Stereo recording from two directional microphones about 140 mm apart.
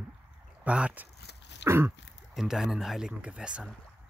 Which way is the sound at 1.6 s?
15° right (ahead or behind).